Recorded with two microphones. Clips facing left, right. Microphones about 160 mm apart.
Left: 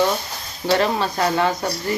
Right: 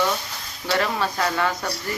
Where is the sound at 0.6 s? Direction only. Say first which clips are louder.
Left 4 dB; 30° left (ahead or behind).